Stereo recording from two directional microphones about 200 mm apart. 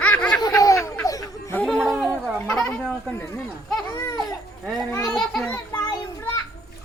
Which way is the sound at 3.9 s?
20° left (ahead or behind).